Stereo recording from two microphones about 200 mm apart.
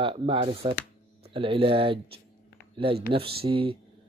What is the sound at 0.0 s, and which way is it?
Speech, 30° right (ahead or behind).